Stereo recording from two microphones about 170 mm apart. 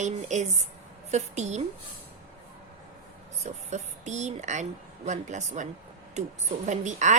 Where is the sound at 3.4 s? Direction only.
45° right (ahead or behind).